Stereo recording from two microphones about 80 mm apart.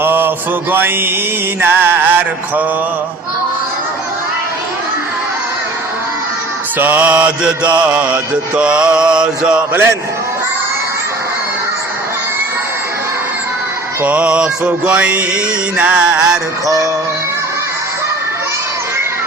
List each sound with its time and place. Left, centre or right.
0.0 s mantra: right
6.7 s mantra: right
14.0 s mantra: centre
16.6 s music: right